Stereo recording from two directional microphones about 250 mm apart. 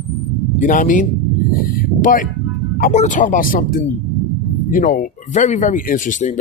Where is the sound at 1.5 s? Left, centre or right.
Left.